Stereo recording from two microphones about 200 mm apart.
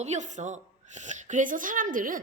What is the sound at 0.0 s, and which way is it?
A woman's voice, 35° right (ahead or behind).